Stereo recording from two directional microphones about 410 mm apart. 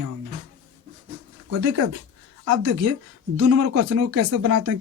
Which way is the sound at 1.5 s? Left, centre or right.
Right.